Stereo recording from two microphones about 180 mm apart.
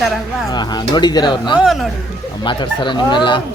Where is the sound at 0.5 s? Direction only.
25° left (ahead or behind).